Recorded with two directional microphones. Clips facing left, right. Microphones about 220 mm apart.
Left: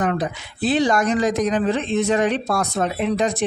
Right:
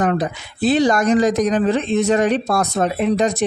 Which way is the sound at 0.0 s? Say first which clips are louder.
Right 3 dB; 40° right (ahead or behind).